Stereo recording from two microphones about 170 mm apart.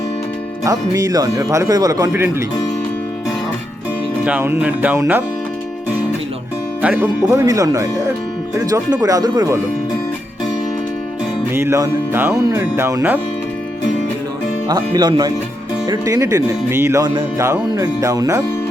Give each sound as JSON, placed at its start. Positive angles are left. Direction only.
{"t": 0.6, "sound": "speech", "side_deg": -20}
{"t": 4.2, "sound": "speech", "side_deg": -10}
{"t": 6.8, "sound": "speech", "side_deg": -10}
{"t": 11.5, "sound": "speech", "side_deg": -15}
{"t": 14.7, "sound": "speech", "side_deg": -25}